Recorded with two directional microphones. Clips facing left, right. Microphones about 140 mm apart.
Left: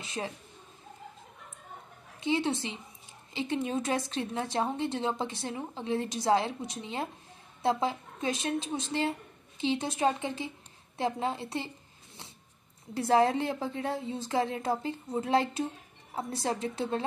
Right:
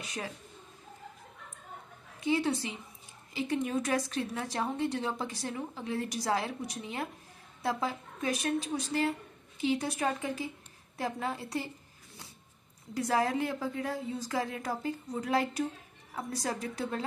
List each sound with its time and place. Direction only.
0.0 s a woman's voice: 25° left (ahead or behind)
2.1 s a woman's voice: 25° left (ahead or behind)
12.9 s a woman's voice: 25° left (ahead or behind)